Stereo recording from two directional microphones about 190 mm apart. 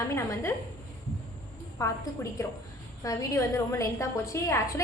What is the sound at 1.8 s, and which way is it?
A woman's voice, 15° left (ahead or behind).